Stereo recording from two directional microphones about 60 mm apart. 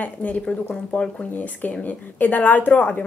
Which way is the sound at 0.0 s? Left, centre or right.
Left.